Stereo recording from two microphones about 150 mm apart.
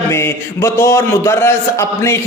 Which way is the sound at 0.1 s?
15° left (ahead or behind).